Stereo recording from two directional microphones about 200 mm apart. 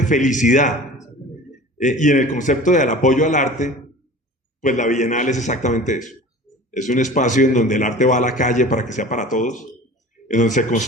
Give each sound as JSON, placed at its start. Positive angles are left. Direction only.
{"t": 0.0, "sound": "a man's voice", "side_deg": 40}
{"t": 1.8, "sound": "a man's voice", "side_deg": 40}